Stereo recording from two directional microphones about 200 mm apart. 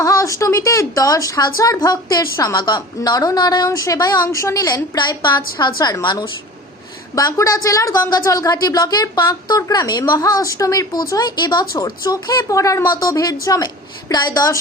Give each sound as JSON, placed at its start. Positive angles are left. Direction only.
{"t": 0.0, "sound": "a woman's voice", "side_deg": 15}